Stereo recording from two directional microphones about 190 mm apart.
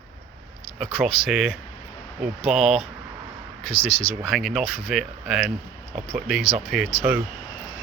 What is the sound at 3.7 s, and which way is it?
Speech, 30° left (ahead or behind).